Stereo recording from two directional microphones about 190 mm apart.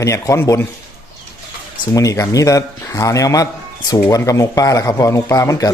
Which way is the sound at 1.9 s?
15° left (ahead or behind).